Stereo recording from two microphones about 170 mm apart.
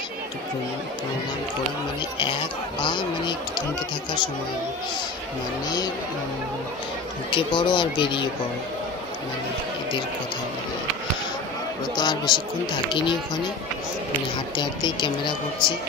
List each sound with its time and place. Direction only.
2.8 s speech: 25° left (ahead or behind)
7.2 s speech: 30° left (ahead or behind)
11.9 s speech: 25° left (ahead or behind)
14.6 s speech: 25° left (ahead or behind)